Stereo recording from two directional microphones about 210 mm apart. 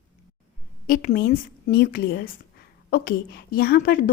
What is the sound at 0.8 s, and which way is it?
A woman's voice, 45° left (ahead or behind).